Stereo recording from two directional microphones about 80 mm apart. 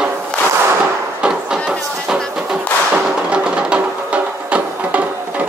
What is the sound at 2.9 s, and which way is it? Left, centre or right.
Music, centre.